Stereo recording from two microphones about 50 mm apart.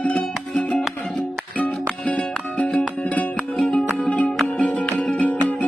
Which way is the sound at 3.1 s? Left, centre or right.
Left.